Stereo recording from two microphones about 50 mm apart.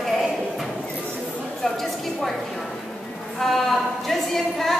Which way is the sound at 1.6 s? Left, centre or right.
Centre.